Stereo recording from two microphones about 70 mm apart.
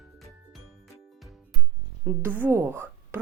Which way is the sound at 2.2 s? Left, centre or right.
Right.